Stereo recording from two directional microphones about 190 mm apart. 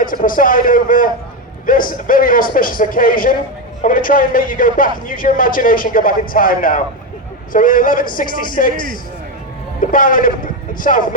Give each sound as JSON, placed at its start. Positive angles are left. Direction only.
{"t": 0.0, "sound": "a man's voice", "side_deg": 45}
{"t": 9.9, "sound": "a man's voice", "side_deg": 45}